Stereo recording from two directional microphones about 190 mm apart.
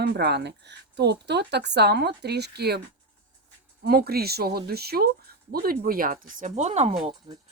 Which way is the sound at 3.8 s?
55° right (ahead or behind).